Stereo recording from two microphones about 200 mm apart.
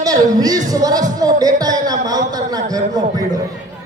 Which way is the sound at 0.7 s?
20° right (ahead or behind).